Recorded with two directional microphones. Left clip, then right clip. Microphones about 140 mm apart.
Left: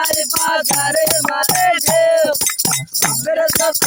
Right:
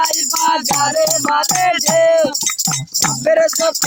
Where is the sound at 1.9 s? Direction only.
25° right (ahead or behind).